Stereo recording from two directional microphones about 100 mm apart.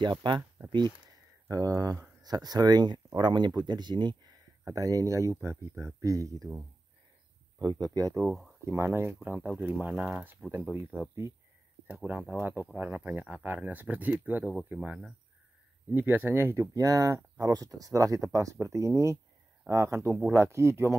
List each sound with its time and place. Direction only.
0.0 s speech: 50° right (ahead or behind)
0.6 s a sound: 20° right (ahead or behind)
1.0 s speech: 35° right (ahead or behind)
4.6 s speech: 35° right (ahead or behind)
7.5 s speech: 45° right (ahead or behind)
8.2 s speech: centre (ahead or behind)
8.6 s speech: 25° right (ahead or behind)
11.0 s speech: 25° right (ahead or behind)
11.9 s speech: 15° right (ahead or behind)
14.4 s speech: centre (ahead or behind)
14.7 s speech: 10° right (ahead or behind)
15.9 s speech: 20° right (ahead or behind)